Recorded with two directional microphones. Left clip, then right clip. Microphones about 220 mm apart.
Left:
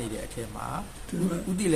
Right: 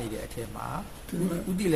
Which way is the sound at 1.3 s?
10° left (ahead or behind).